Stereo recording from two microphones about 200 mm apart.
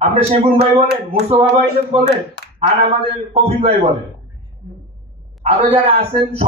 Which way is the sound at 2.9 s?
30° right (ahead or behind).